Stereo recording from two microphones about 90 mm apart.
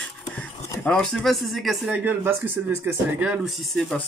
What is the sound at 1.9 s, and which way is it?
Speech, 25° right (ahead or behind).